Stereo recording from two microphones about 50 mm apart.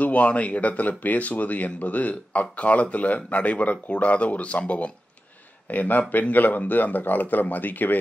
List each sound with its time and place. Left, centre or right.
0.0 s speech: left